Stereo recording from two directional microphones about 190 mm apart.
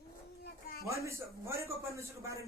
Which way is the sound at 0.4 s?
55° left (ahead or behind).